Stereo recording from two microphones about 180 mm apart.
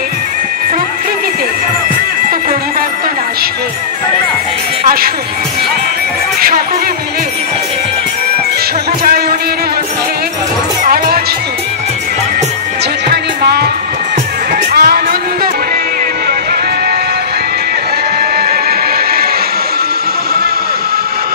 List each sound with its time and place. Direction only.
10.8 s music: 55° right (ahead or behind)
13.1 s music: 65° right (ahead or behind)
14.7 s music: 60° right (ahead or behind)